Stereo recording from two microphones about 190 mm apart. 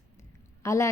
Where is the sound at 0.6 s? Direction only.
15° left (ahead or behind).